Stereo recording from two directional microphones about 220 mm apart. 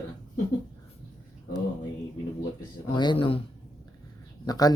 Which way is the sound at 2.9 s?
20° left (ahead or behind).